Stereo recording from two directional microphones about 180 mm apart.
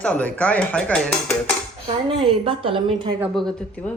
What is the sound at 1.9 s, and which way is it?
Speech, 30° right (ahead or behind).